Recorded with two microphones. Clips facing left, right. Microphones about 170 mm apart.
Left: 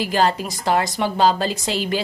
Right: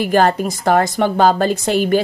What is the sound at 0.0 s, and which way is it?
A woman's voice, 55° right (ahead or behind).